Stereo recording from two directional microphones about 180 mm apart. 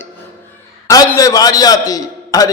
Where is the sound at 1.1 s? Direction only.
20° left (ahead or behind).